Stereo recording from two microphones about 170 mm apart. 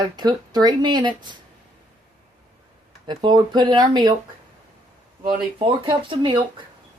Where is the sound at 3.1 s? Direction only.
25° right (ahead or behind).